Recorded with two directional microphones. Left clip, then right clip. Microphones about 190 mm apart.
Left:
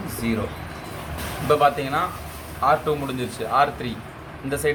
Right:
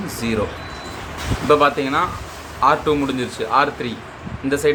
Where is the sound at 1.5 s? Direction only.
25° right (ahead or behind).